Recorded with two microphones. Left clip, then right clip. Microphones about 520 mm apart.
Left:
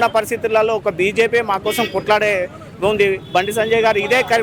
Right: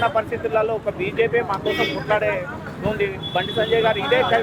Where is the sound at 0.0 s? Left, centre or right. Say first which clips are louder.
Left 4 dB; left.